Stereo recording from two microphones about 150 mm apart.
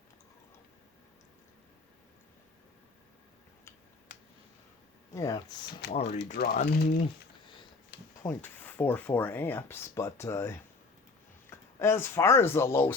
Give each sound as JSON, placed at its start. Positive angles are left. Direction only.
{"t": 5.1, "sound": "speech", "side_deg": 25}
{"t": 6.3, "sound": "speech", "side_deg": 90}
{"t": 8.2, "sound": "speech", "side_deg": 15}